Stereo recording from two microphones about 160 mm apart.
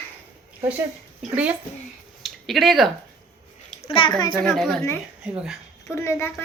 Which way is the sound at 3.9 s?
30° left (ahead or behind).